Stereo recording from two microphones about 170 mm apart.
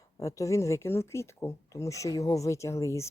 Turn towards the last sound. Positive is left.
turn(degrees=15)  # may be behind; listen again after turning